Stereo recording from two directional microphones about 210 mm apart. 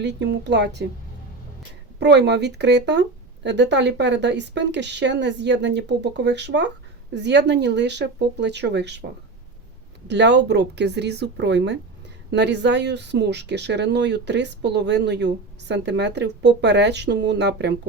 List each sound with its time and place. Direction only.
0.0 s speech: 55° right (ahead or behind)
2.0 s speech: 55° right (ahead or behind)
10.1 s speech: 55° right (ahead or behind)